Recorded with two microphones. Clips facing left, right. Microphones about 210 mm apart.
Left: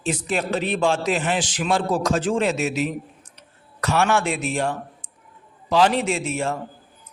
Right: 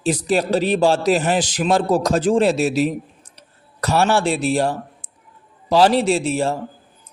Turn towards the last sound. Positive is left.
turn(degrees=-35)  # may be behind; listen again after turning